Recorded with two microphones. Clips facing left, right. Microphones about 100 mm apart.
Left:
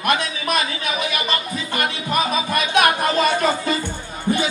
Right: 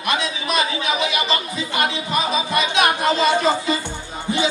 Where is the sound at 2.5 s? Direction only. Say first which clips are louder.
Left 2 dB; 50° left (ahead or behind).